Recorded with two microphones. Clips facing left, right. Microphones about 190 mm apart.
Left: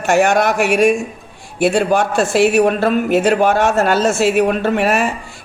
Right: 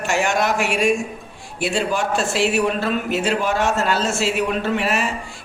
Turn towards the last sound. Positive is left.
turn(degrees=50)  # may be behind; listen again after turning